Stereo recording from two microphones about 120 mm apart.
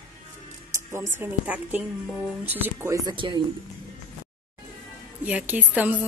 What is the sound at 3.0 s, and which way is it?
Speech, 40° right (ahead or behind).